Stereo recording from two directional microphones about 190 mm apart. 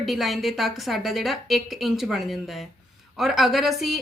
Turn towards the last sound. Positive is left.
turn(degrees=0)  # may be behind; listen again after turning